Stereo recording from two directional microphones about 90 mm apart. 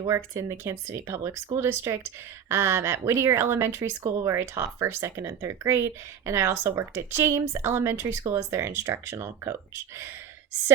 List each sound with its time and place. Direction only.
0.1 s speech: 30° right (ahead or behind)